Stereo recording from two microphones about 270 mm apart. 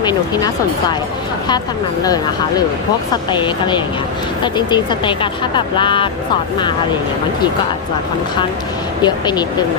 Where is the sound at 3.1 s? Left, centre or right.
Centre.